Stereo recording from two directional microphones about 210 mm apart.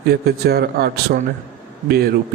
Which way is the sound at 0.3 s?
50° right (ahead or behind).